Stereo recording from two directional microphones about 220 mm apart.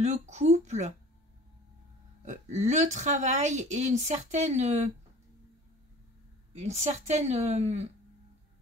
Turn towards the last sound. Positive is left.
turn(degrees=-30)  # may be behind; listen again after turning